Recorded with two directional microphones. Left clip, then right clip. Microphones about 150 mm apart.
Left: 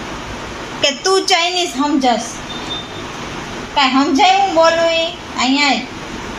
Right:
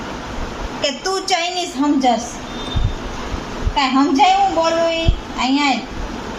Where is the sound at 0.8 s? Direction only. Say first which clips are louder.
Left 6 dB; 30° left (ahead or behind).